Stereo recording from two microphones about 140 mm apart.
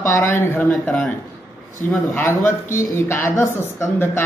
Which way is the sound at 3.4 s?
20° left (ahead or behind).